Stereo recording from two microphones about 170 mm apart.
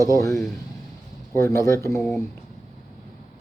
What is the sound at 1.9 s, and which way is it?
Speech, centre (ahead or behind).